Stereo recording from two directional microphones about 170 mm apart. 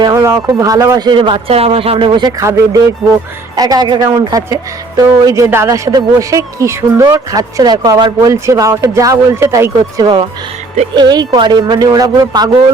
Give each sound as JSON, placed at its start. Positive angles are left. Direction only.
{"t": 0.0, "sound": "speech", "side_deg": -20}